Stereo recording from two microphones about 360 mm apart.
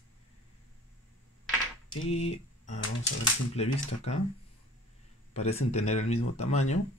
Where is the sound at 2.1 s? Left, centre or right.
Centre.